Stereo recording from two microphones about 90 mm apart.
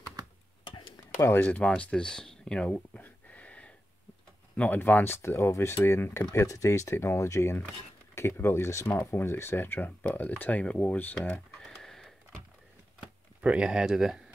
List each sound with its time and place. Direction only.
0.7 s a sound: 65° left (ahead or behind)
1.1 s speech: 25° left (ahead or behind)
1.8 s a sound: 15° left (ahead or behind)
4.6 s speech: 20° left (ahead or behind)
6.3 s speech: 35° left (ahead or behind); by 11.1 s 20° left (ahead or behind)
11.2 s computer keyboard: 15° left (ahead or behind)
13.0 s speech: 10° right (ahead or behind)